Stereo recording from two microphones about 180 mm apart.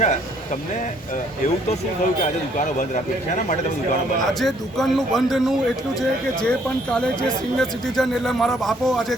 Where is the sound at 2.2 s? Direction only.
45° left (ahead or behind).